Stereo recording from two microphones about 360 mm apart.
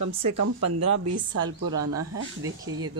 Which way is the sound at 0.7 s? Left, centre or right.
Right.